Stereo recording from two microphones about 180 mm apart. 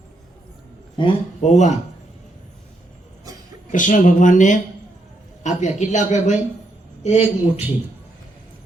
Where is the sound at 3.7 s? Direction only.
45° left (ahead or behind).